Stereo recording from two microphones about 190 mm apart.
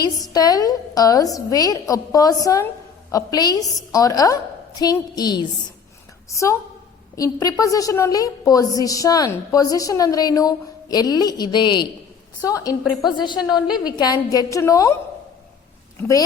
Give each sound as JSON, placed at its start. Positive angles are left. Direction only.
{"t": 0.3, "sound": "a woman's voice", "side_deg": 20}